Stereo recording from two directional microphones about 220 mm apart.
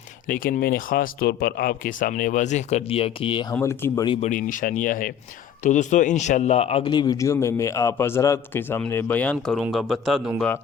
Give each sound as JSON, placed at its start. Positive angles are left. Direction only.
{"t": 0.3, "sound": "speech", "side_deg": 40}
{"t": 3.5, "sound": "speech", "side_deg": 10}
{"t": 4.3, "sound": "speech", "side_deg": 35}